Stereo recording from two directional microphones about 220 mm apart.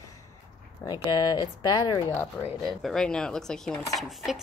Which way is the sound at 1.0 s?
20° left (ahead or behind).